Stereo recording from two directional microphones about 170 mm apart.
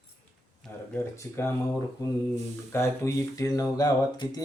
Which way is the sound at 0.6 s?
15° left (ahead or behind).